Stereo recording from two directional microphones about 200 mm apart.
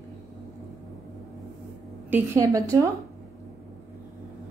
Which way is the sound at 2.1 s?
15° right (ahead or behind).